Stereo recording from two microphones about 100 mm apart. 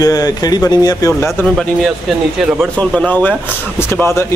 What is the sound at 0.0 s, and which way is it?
Speech, 40° left (ahead or behind).